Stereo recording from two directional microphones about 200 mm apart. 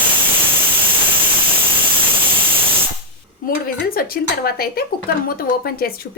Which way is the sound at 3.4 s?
45° left (ahead or behind).